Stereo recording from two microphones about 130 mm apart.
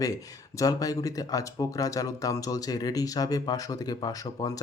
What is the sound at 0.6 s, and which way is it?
Speech, 30° left (ahead or behind).